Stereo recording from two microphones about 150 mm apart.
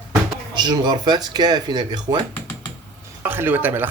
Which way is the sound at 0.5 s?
30° right (ahead or behind).